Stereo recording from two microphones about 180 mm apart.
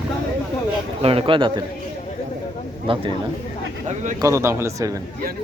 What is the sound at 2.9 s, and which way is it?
Speech, 30° right (ahead or behind).